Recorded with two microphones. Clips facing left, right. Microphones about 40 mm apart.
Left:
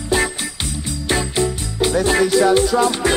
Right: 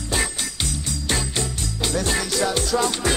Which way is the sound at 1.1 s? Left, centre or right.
Centre.